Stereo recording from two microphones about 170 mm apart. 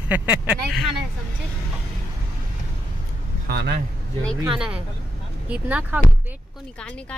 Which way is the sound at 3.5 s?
70° right (ahead or behind).